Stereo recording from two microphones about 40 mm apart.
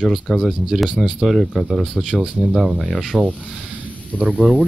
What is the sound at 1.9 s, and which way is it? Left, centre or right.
Speech, right.